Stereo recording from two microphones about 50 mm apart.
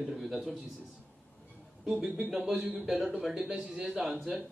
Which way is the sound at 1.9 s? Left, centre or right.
Centre.